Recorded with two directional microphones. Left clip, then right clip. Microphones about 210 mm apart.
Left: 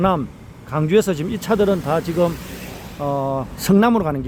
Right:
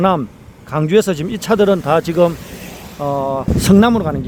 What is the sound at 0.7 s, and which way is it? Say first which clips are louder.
Speech: right 3 dB; 10° right (ahead or behind).